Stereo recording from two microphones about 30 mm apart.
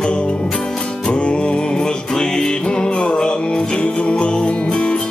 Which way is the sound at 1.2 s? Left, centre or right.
Left.